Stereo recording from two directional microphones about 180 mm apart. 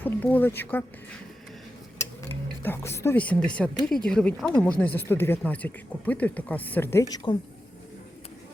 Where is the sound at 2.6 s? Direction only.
15° left (ahead or behind).